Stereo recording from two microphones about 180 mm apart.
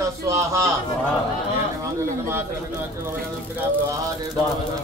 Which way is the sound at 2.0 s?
15° right (ahead or behind).